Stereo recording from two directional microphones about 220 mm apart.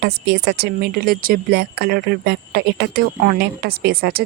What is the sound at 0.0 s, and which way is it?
Speech, 50° right (ahead or behind).